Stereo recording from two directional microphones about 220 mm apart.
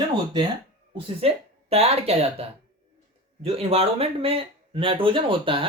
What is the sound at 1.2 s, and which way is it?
Speech, 25° right (ahead or behind).